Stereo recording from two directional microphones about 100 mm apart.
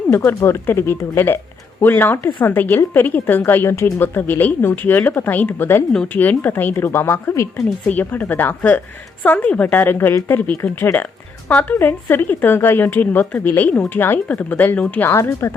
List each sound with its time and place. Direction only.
0.1 s speech: 25° left (ahead or behind)
5.9 s a woman's voice: 10° left (ahead or behind)
15.1 s speech: 30° left (ahead or behind)